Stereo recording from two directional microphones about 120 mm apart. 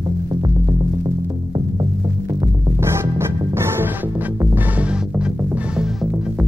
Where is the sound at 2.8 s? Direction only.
20° right (ahead or behind).